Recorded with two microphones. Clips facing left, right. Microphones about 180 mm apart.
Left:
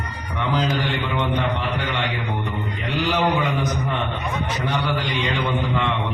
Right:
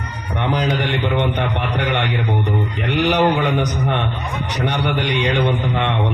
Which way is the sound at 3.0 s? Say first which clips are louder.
Right 5 dB; 70° right (ahead or behind).